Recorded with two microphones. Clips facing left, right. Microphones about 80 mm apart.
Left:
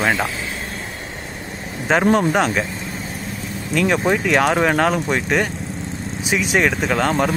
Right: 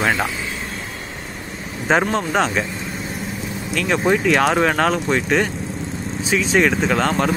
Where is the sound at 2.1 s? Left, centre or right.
Centre.